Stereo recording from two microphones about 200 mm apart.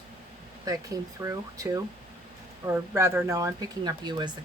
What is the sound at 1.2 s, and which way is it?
Speech, 15° right (ahead or behind).